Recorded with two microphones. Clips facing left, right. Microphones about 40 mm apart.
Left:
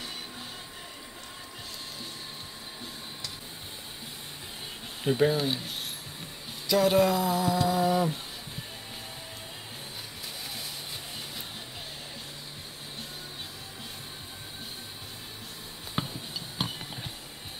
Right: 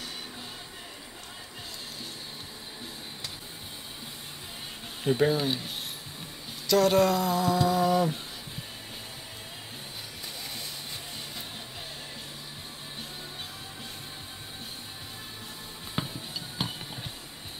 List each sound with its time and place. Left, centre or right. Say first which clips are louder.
5.0 s speech: even; centre
6.7 s a sound: right 1 dB; centre
15.9 s music: even; centre